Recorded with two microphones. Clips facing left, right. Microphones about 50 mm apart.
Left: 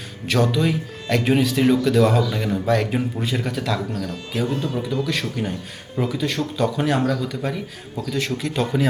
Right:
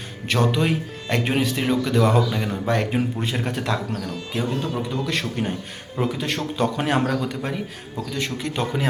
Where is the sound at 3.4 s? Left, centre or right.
Right.